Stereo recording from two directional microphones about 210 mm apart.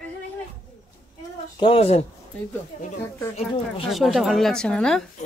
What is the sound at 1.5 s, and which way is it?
Speech, 25° left (ahead or behind).